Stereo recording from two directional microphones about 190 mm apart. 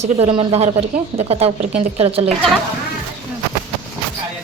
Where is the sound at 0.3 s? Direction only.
35° right (ahead or behind).